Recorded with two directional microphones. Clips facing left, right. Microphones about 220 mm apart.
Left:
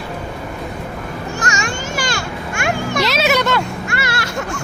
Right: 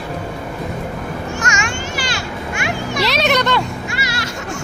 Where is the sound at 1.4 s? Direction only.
35° left (ahead or behind).